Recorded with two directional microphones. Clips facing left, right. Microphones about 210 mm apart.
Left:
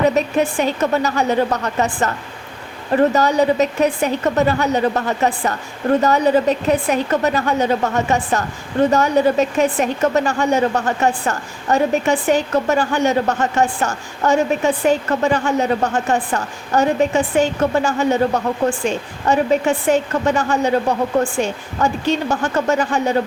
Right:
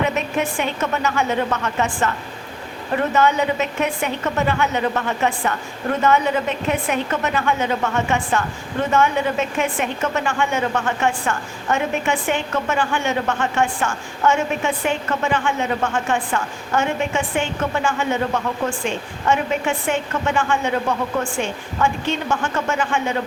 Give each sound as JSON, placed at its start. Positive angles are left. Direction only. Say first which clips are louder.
{"t": 0.0, "sound": "a woman's voice", "louder": "left 5 dB", "side_deg": 35}